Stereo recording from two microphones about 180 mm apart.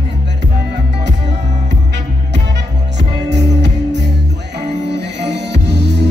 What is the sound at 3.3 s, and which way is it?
Music, 70° right (ahead or behind).